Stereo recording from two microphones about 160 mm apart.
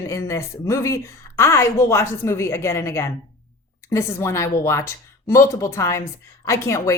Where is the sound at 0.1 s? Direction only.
20° left (ahead or behind).